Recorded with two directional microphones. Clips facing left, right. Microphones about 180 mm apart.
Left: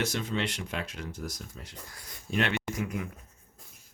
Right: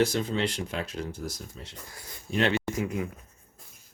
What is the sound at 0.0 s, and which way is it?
Speech, 30° right (ahead or behind).